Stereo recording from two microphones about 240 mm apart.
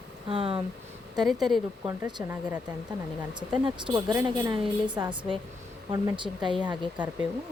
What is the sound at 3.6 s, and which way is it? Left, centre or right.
Speech, centre.